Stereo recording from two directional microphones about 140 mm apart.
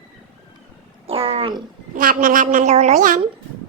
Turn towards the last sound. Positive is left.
turn(degrees=-65)  # may be behind; listen again after turning